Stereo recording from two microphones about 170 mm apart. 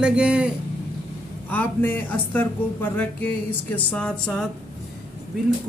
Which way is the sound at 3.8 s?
5° left (ahead or behind).